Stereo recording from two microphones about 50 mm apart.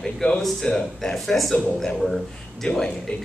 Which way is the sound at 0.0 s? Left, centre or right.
Centre.